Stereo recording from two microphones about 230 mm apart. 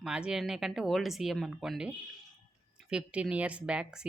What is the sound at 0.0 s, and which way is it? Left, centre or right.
A woman's voice, centre.